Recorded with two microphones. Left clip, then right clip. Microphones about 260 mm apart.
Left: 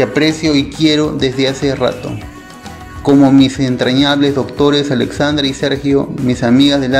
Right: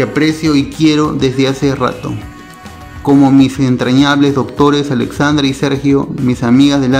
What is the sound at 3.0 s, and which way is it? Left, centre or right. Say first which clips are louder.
Speech: even; centre.